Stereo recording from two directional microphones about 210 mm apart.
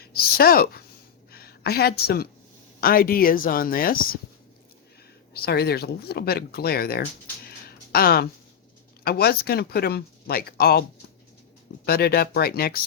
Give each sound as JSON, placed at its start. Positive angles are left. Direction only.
{"t": 0.0, "sound": "a woman's voice", "side_deg": 45}
{"t": 5.3, "sound": "speech", "side_deg": 50}
{"t": 11.9, "sound": "speech", "side_deg": 45}